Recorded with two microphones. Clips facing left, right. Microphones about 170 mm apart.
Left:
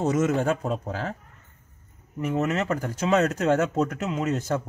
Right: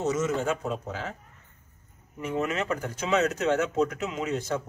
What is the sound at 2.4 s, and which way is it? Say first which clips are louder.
Speech: left 3 dB; 40° left (ahead or behind).